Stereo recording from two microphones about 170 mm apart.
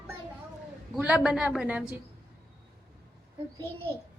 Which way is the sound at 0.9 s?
5° right (ahead or behind).